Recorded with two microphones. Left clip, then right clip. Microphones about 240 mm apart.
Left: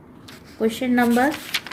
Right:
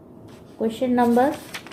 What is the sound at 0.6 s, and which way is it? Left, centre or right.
Speech, left.